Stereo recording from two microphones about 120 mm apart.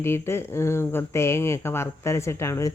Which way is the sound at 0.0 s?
20° left (ahead or behind).